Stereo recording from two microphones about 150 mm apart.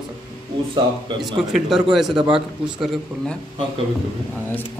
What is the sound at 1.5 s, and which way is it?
A man's voice, centre (ahead or behind).